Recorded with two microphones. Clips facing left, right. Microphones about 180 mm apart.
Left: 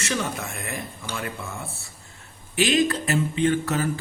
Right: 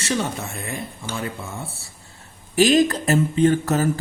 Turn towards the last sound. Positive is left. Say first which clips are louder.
# right 4 dB
turn(degrees=-40)  # may be behind; listen again after turning